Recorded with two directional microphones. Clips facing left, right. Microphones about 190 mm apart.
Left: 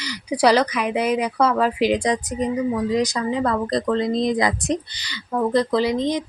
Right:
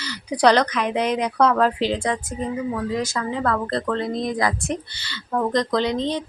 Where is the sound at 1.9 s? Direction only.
15° left (ahead or behind).